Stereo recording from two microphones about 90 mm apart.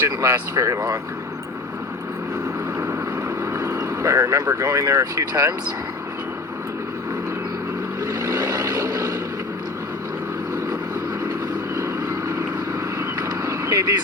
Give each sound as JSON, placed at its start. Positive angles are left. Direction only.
{"t": 0.0, "sound": "speech", "side_deg": -30}
{"t": 2.8, "sound": "vehicle", "side_deg": -35}
{"t": 8.0, "sound": "vehicle", "side_deg": -35}
{"t": 11.8, "sound": "vehicle", "side_deg": -35}
{"t": 13.0, "sound": "a sound", "side_deg": -35}